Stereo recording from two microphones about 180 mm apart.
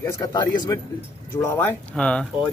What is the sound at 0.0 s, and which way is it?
A man's voice, 20° left (ahead or behind).